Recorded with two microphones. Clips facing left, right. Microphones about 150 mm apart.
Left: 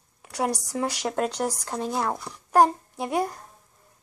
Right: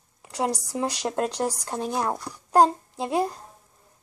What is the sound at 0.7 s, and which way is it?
Speech, 15° right (ahead or behind).